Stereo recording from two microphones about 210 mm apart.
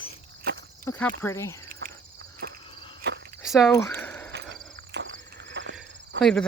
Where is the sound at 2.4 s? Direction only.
55° right (ahead or behind).